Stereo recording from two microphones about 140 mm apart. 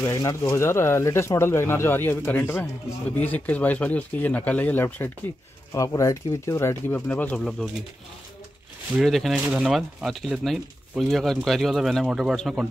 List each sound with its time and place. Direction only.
0.0 s speech: 20° left (ahead or behind); by 7.5 s 5° left (ahead or behind)
8.9 s speech: centre (ahead or behind)